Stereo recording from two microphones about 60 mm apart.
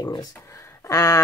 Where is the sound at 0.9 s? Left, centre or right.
Left.